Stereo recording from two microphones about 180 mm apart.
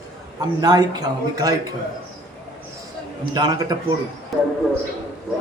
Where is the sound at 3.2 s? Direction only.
20° right (ahead or behind).